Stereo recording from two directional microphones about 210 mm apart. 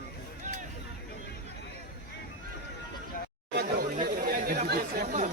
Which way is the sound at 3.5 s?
50° right (ahead or behind).